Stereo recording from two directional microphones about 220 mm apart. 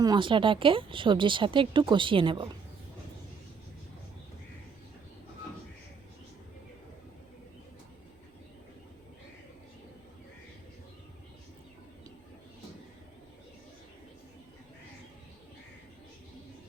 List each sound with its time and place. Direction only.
0.0 s speech: 20° right (ahead or behind)